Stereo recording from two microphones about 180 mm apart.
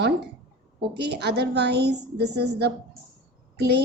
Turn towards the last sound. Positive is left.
turn(degrees=-65)  # may be behind; listen again after turning